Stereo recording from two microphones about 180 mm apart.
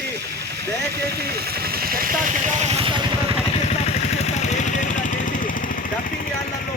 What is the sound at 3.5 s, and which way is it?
Vehicle, 35° left (ahead or behind).